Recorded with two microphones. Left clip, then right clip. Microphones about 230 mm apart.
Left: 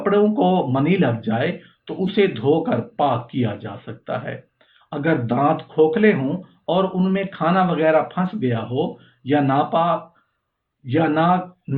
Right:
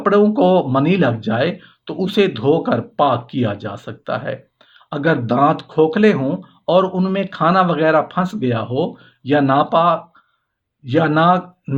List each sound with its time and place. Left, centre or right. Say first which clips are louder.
0.0 s speech: right 4 dB; right